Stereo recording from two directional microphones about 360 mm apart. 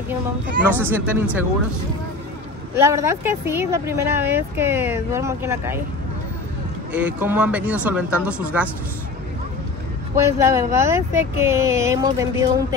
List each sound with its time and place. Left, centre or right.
0.7 s speech: centre
2.7 s speech: centre
6.9 s speech: centre
10.1 s speech: centre